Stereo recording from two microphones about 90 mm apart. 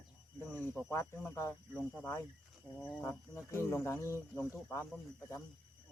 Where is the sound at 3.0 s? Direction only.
30° left (ahead or behind).